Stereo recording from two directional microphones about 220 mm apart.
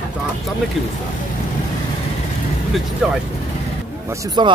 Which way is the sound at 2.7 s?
5° right (ahead or behind).